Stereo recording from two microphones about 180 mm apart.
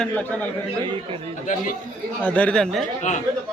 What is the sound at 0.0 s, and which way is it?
Speech, 5° left (ahead or behind).